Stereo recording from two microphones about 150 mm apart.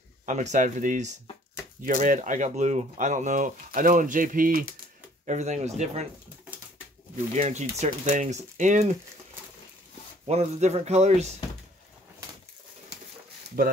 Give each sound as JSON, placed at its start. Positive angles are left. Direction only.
{"t": 0.3, "sound": "speech", "side_deg": -55}
{"t": 5.2, "sound": "speech", "side_deg": -50}
{"t": 7.3, "sound": "speech", "side_deg": -50}
{"t": 10.2, "sound": "speech", "side_deg": -50}
{"t": 13.6, "sound": "speech", "side_deg": -75}